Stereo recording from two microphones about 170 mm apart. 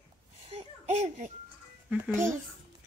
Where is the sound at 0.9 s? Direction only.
45° right (ahead or behind).